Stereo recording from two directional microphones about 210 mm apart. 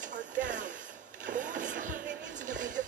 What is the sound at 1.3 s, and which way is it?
Vehicle, 40° right (ahead or behind).